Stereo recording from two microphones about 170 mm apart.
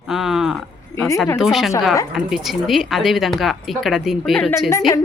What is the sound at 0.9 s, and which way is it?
Speech, 15° left (ahead or behind).